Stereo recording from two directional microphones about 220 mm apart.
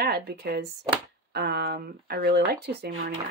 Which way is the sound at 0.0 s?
45° right (ahead or behind).